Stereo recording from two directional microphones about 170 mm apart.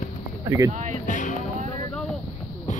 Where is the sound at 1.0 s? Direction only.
50° left (ahead or behind).